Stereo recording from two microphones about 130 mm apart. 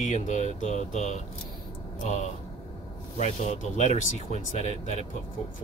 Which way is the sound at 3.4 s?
65° left (ahead or behind).